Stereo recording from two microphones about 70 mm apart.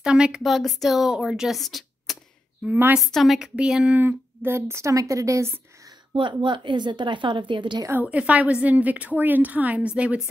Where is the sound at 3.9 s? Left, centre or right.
Right.